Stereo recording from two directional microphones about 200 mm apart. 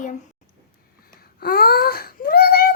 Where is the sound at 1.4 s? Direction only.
50° left (ahead or behind).